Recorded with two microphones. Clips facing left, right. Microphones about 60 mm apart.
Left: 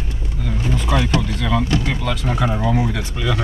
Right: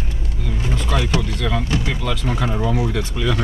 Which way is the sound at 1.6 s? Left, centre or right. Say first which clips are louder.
Left 2 dB; centre.